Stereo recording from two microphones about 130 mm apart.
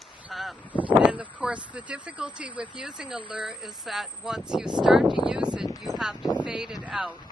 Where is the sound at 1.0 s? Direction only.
10° right (ahead or behind).